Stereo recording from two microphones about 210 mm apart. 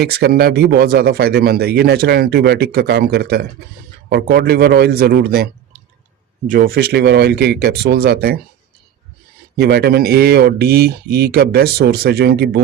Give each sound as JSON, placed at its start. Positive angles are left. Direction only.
{"t": 0.0, "sound": "speech", "side_deg": -50}
{"t": 9.6, "sound": "speech", "side_deg": -50}